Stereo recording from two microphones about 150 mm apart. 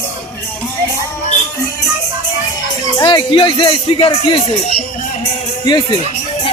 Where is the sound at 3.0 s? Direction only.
30° left (ahead or behind).